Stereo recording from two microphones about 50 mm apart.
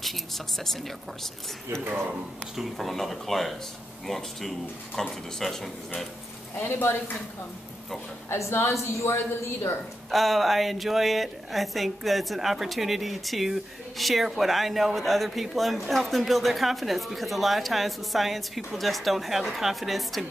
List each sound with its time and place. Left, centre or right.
0.0 s a woman's voice: centre
2.5 s a woman's voice: centre
6.6 s speech: left
8.3 s a woman's voice: left
10.1 s a woman's voice: centre